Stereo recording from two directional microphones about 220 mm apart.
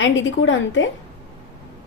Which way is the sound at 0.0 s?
55° left (ahead or behind).